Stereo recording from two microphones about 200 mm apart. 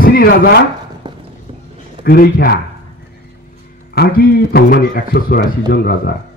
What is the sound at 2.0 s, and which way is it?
Speech, 50° left (ahead or behind).